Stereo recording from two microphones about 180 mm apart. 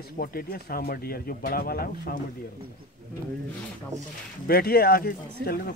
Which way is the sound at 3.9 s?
40° right (ahead or behind).